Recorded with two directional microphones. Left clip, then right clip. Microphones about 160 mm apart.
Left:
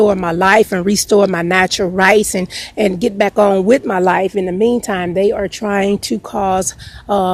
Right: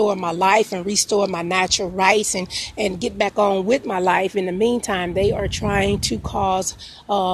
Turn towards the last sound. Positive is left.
turn(degrees=40)  # may be behind; listen again after turning